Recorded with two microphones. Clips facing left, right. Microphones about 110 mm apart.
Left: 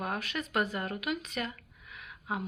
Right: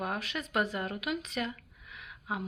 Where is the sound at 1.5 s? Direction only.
5° right (ahead or behind).